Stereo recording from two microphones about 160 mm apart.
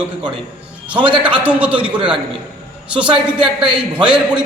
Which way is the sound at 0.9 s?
30° right (ahead or behind).